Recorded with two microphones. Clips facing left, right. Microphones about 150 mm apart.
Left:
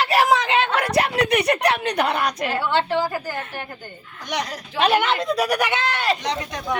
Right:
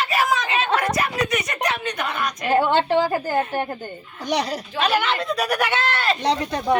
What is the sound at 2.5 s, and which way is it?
A woman's voice, 50° right (ahead or behind).